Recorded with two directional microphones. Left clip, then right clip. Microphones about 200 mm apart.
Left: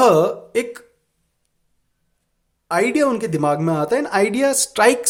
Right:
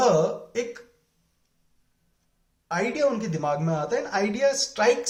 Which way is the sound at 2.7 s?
55° left (ahead or behind).